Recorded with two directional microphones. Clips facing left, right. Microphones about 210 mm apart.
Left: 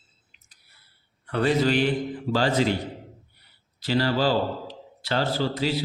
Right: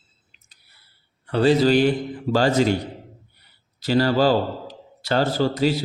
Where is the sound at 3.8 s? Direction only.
45° right (ahead or behind).